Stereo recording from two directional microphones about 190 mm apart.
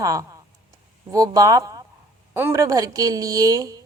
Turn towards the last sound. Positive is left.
turn(degrees=-20)  # may be behind; listen again after turning